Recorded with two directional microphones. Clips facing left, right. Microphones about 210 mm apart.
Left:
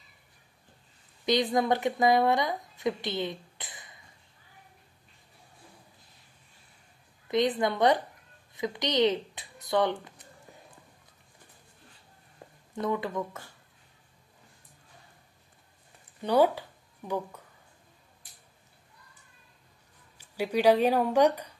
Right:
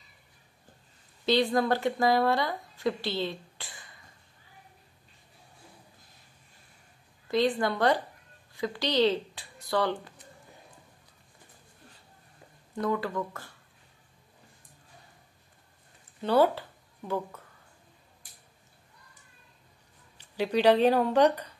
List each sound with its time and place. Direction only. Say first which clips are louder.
1.2 s speech: right 1 dB; 15° left (ahead or behind)
7.2 s speech: even; 20° left (ahead or behind)
12.8 s speech: right 1 dB; 20° left (ahead or behind)
16.2 s speech: even; 15° left (ahead or behind)
20.2 s speech: right 1 dB; 10° left (ahead or behind)